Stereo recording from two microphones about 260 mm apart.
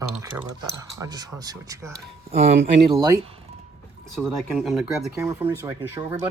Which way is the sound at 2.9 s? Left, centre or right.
Centre.